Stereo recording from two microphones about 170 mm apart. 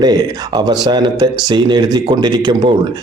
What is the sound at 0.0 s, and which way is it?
A man's voice, 25° right (ahead or behind).